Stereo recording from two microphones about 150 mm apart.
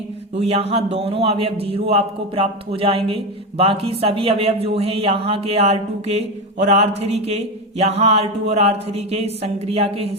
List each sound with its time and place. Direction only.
0.3 s mantra: 45° right (ahead or behind)
1.6 s speech: 40° right (ahead or behind)
6.6 s mantra: 45° right (ahead or behind)